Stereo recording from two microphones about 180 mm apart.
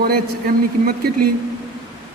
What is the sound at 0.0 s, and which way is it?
A man's voice, 55° right (ahead or behind).